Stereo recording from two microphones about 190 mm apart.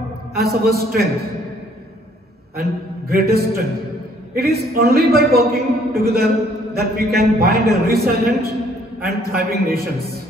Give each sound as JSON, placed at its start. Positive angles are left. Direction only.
{"t": 0.4, "sound": "a man's voice", "side_deg": -55}
{"t": 2.5, "sound": "a man's voice", "side_deg": -55}